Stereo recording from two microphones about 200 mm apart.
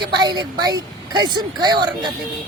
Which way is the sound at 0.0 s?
20° right (ahead or behind).